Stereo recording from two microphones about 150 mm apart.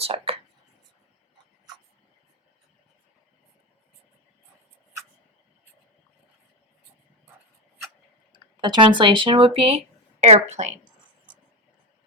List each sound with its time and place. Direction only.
0.0 s speech: 40° right (ahead or behind)
8.3 s a woman's voice: 30° right (ahead or behind); by 10.7 s 50° right (ahead or behind)